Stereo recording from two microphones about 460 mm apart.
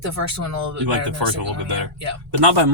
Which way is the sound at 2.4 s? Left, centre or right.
Right.